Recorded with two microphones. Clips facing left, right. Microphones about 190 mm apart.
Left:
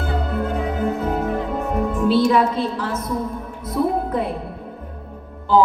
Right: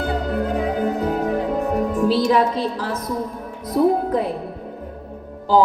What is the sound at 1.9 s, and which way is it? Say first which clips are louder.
A woman's voice: left 2 dB; 35° right (ahead or behind).